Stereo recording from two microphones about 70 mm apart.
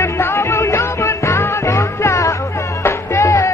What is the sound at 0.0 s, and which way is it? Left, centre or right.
Music, left.